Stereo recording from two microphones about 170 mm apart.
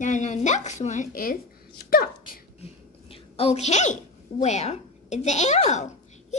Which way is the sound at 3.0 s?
35° left (ahead or behind).